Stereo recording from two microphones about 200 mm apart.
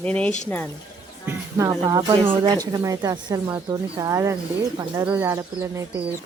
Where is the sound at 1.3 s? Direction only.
15° right (ahead or behind).